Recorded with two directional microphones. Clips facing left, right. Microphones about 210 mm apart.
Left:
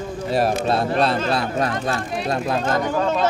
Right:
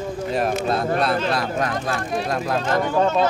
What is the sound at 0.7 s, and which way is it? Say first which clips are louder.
A man's voice: left 1 dB; 30° left (ahead or behind).